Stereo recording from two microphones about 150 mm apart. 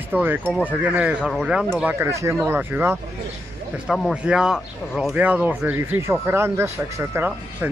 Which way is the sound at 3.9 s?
5° right (ahead or behind).